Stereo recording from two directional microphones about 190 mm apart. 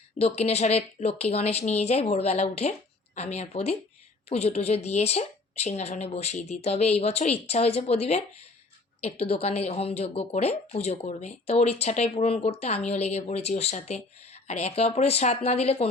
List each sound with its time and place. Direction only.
0.2 s speech: 35° left (ahead or behind)